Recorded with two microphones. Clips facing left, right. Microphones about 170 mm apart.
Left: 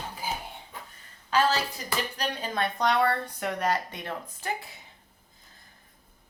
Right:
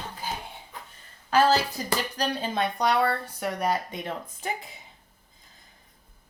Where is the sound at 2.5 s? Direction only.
10° right (ahead or behind).